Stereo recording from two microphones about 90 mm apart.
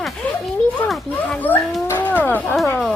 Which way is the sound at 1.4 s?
20° left (ahead or behind).